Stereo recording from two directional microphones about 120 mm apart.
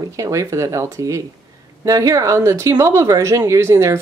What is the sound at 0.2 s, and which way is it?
Speech, 25° right (ahead or behind).